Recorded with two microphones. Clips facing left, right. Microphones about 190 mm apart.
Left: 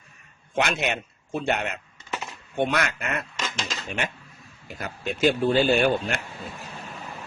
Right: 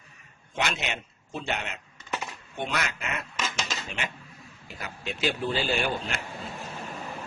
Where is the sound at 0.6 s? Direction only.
50° left (ahead or behind).